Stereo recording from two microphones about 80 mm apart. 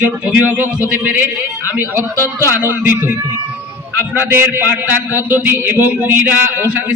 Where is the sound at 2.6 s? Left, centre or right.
Right.